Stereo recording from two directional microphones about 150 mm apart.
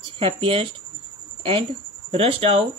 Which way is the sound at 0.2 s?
40° right (ahead or behind).